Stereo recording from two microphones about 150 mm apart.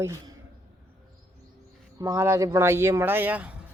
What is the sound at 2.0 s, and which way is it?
Speech, 20° right (ahead or behind).